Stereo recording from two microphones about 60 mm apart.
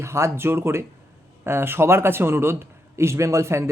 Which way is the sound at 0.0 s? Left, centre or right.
Right.